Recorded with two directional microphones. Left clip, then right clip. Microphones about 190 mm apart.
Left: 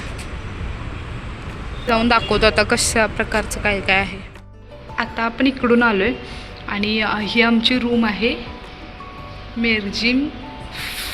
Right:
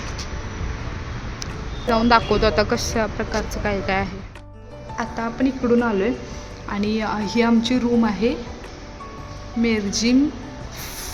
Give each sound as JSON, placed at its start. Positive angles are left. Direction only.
{"t": 1.9, "sound": "speech", "side_deg": -10}
{"t": 3.6, "sound": "a woman's voice", "side_deg": -10}
{"t": 9.6, "sound": "speech", "side_deg": -25}